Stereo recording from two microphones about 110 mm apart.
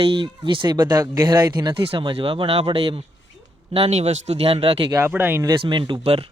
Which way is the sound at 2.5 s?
65° right (ahead or behind).